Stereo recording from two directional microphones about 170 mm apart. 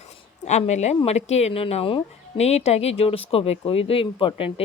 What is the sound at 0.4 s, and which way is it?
Speech, 45° left (ahead or behind).